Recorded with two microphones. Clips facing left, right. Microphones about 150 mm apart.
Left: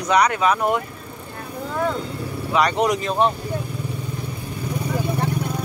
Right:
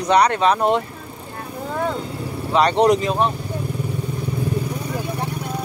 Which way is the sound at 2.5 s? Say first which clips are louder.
Right 4 dB; 30° right (ahead or behind).